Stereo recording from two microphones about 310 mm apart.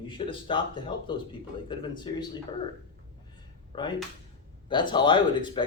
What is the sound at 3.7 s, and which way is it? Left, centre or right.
Speech, centre.